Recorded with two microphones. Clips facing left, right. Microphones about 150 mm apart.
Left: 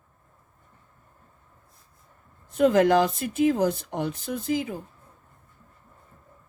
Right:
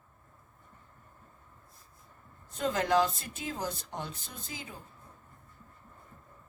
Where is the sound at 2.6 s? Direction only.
60° left (ahead or behind).